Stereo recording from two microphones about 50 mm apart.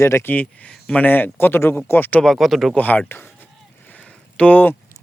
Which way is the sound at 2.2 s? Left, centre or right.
Centre.